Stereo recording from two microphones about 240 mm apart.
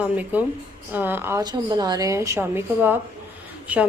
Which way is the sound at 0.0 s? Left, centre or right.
Centre.